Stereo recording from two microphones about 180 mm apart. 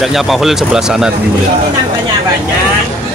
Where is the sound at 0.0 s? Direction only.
Centre (ahead or behind).